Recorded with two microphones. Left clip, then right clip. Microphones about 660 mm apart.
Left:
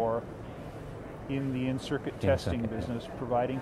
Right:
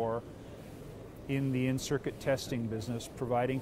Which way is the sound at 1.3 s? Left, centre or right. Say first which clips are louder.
Even; right.